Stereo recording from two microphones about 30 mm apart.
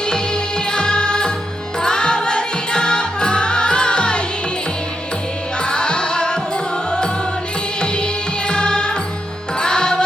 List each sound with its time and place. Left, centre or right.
0.7 s music: left
5.6 s music: left
7.8 s music: left